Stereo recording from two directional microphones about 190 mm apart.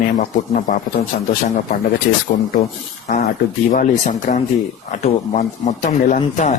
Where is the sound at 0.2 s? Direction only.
40° left (ahead or behind).